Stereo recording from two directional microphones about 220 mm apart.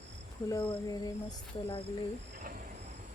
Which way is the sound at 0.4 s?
15° left (ahead or behind).